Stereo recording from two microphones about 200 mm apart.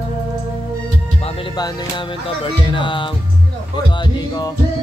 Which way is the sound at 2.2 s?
25° left (ahead or behind).